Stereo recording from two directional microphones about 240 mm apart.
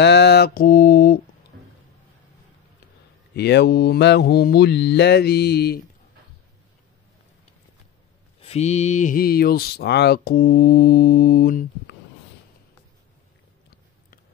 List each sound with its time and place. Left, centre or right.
0.0 s mantra: left
3.3 s speech: left
8.4 s speech: left